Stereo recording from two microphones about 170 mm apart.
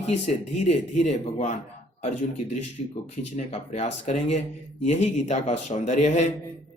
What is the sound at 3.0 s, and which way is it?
Speech, 40° left (ahead or behind).